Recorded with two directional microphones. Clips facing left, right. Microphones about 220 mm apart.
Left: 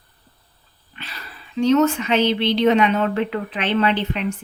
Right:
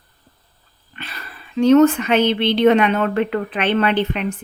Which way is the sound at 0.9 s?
55° right (ahead or behind).